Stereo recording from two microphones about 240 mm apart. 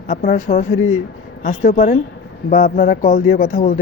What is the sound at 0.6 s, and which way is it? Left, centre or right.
Speech, left.